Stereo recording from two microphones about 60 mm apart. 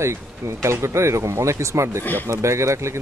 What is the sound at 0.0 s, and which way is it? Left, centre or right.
Speech, right.